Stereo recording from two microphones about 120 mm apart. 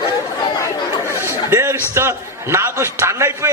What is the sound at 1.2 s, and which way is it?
A man's voice, 20° right (ahead or behind).